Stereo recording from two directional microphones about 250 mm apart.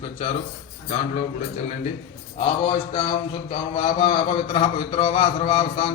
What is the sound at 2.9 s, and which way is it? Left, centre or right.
A man's voice, centre.